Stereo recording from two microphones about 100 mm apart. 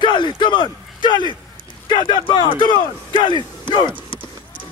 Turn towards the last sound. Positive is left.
turn(degrees=50)  # may be behind; listen again after turning